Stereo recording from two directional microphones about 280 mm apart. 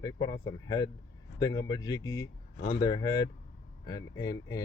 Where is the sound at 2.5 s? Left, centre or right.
Left.